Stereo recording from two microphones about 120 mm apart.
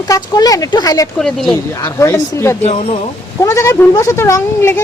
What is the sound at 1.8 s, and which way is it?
Speech, 20° left (ahead or behind).